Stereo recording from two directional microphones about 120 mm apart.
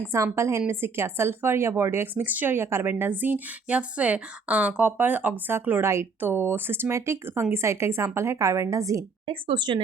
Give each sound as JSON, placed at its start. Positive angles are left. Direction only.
{"t": 0.3, "sound": "speech", "side_deg": -25}
{"t": 9.2, "sound": "speech", "side_deg": -45}